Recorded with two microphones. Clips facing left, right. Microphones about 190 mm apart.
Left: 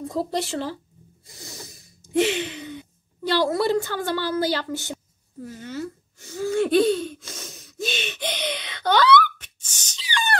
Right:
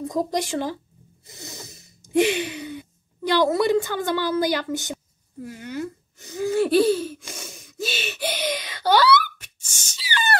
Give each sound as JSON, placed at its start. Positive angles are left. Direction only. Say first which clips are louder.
{"t": 0.1, "sound": "speech", "louder": "right 1 dB", "side_deg": -15}
{"t": 1.2, "sound": "gasp", "louder": "right 1 dB", "side_deg": -20}
{"t": 4.9, "sound": "a sound", "louder": "right 1 dB", "side_deg": -10}
{"t": 6.5, "sound": "gasp", "louder": "right 1 dB", "side_deg": -5}